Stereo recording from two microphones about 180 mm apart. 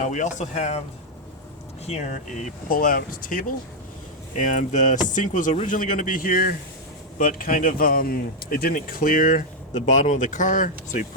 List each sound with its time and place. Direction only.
0.0 s speech: 40° left (ahead or behind)
1.9 s speech: 40° left (ahead or behind)